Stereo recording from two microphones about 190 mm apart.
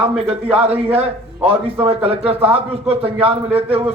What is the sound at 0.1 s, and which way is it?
Speech, 5° right (ahead or behind).